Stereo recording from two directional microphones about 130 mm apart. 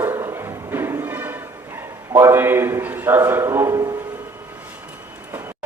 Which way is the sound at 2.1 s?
20° right (ahead or behind).